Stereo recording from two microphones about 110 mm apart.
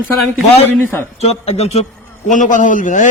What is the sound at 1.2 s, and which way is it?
A man's voice, 70° left (ahead or behind).